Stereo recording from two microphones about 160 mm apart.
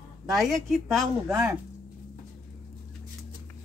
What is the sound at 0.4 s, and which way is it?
A woman's voice, centre (ahead or behind).